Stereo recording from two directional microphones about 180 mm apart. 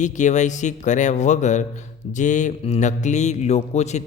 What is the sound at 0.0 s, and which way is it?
Speech, 40° left (ahead or behind).